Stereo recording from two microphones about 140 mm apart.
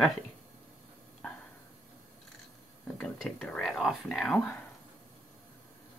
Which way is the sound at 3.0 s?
5° left (ahead or behind).